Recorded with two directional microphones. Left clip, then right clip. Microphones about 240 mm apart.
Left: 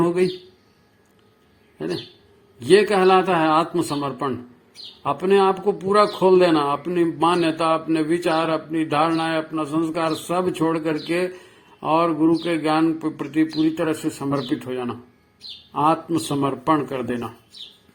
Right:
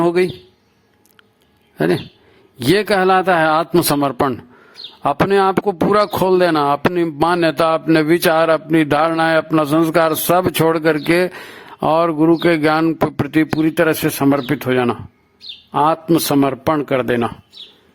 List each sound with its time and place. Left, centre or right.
0.0 s speech: right
2.9 s a man's voice: right